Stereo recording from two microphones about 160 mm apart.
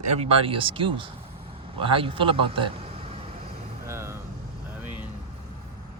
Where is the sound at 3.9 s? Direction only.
15° right (ahead or behind).